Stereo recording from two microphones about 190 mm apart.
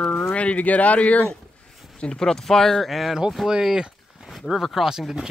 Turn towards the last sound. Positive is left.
turn(degrees=-5)  # may be behind; listen again after turning